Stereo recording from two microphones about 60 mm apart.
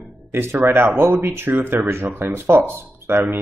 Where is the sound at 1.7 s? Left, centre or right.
Right.